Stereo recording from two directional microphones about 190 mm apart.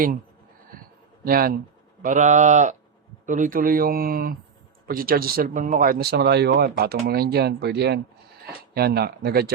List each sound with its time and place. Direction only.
1.2 s speech: 50° right (ahead or behind)